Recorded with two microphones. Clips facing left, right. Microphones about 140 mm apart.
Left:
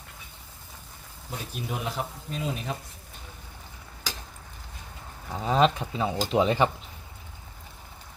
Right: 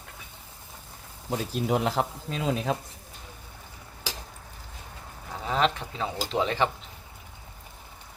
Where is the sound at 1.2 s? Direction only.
90° right.